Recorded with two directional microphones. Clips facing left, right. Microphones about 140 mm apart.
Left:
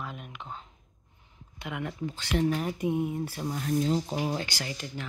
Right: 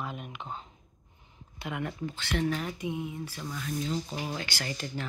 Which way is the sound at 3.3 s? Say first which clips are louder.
Left 7 dB; 35° left (ahead or behind).